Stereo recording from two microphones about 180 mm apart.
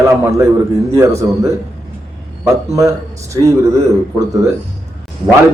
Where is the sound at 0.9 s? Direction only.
15° right (ahead or behind).